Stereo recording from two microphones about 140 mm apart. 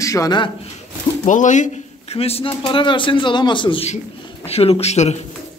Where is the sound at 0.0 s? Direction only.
25° left (ahead or behind).